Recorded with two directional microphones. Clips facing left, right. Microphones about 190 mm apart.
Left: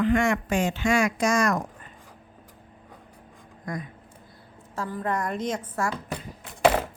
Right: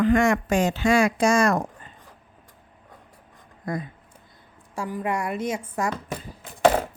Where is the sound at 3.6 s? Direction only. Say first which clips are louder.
Right 4 dB; 30° right (ahead or behind).